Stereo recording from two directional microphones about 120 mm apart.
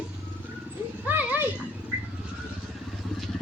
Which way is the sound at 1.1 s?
15° right (ahead or behind).